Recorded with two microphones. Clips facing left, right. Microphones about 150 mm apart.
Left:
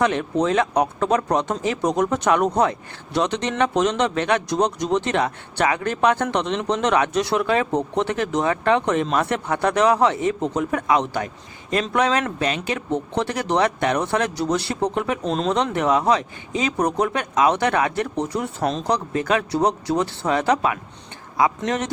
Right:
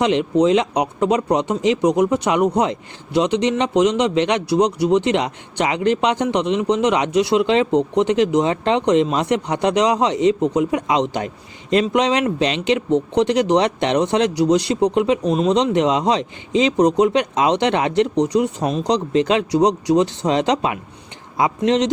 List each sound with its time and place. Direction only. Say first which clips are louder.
0.0 s speech: right 4 dB; 20° right (ahead or behind)